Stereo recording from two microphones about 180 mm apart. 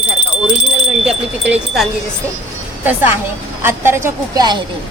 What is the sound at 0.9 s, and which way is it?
Wind chime, 5° right (ahead or behind).